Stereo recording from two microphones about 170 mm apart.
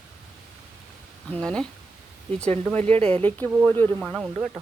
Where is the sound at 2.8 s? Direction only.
35° right (ahead or behind).